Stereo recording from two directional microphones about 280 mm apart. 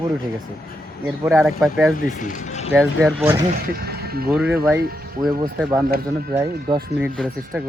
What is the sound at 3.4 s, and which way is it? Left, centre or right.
Speech, right.